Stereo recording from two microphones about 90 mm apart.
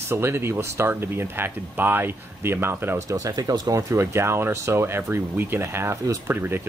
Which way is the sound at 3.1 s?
40° right (ahead or behind).